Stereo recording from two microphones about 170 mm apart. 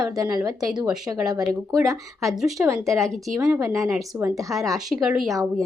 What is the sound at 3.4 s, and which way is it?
Speech, 20° right (ahead or behind).